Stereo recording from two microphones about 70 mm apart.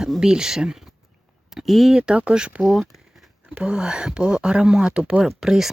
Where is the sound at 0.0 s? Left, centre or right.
Centre.